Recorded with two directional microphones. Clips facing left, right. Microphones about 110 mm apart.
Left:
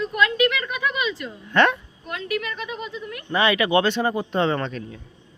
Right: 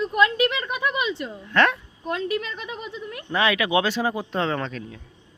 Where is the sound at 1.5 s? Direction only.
Centre (ahead or behind).